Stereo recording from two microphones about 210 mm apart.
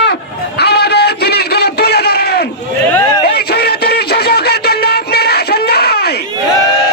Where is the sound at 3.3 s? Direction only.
50° left (ahead or behind).